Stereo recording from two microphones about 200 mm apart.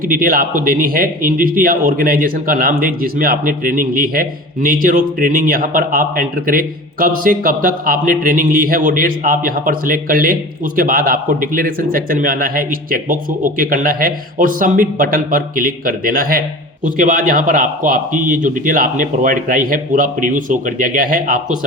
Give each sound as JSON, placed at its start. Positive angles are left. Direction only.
{"t": 0.1, "sound": "a man's voice", "side_deg": -45}